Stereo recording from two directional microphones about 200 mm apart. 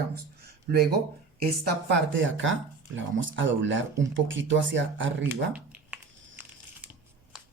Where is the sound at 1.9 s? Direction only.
65° right (ahead or behind).